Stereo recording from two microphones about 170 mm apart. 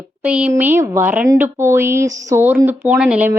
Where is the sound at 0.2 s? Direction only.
5° right (ahead or behind).